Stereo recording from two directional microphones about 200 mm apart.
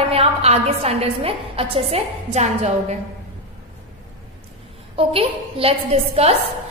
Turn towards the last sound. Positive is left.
turn(degrees=-30)  # may be behind; listen again after turning